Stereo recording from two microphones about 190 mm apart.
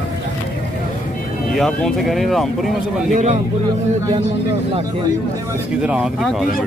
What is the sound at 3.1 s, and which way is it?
Speech, 40° right (ahead or behind).